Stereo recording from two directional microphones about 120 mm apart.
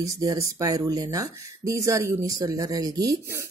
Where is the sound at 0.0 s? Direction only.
30° right (ahead or behind).